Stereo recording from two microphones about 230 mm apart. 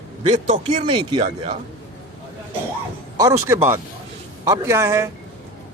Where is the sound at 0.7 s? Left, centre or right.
Centre.